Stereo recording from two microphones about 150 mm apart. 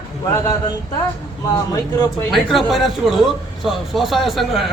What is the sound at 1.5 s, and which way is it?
Speech, 25° left (ahead or behind).